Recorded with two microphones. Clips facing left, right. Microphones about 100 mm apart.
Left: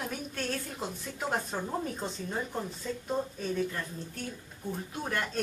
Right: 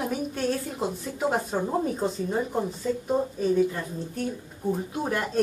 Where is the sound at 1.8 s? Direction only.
10° right (ahead or behind).